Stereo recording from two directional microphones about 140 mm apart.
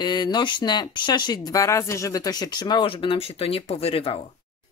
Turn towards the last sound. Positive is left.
turn(degrees=45)  # may be behind; listen again after turning